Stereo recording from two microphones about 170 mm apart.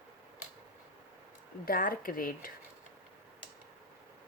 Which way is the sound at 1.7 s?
60° left (ahead or behind).